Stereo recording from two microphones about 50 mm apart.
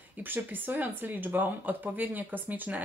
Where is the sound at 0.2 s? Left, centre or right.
Right.